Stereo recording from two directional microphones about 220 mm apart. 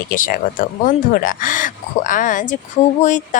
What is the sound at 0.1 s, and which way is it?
A woman's voice, 40° left (ahead or behind).